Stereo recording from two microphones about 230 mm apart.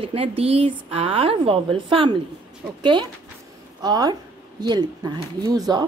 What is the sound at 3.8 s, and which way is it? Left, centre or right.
A woman's voice, centre.